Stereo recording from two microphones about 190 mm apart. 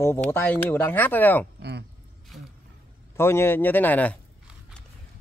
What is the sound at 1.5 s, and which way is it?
Speech, 60° right (ahead or behind).